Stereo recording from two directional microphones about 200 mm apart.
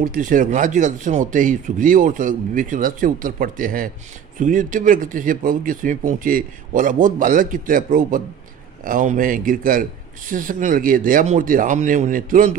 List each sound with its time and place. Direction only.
0.0 s a man's voice: 40° right (ahead or behind)